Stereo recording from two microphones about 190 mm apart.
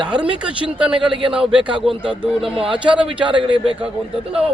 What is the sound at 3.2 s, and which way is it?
Speech, 25° right (ahead or behind).